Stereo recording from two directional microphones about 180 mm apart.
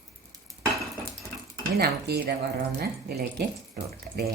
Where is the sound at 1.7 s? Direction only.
60° right (ahead or behind).